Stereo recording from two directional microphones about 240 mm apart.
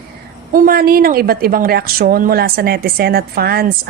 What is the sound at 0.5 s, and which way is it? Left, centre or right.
A woman's voice, right.